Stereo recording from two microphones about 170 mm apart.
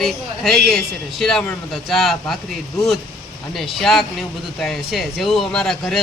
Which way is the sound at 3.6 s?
Centre (ahead or behind).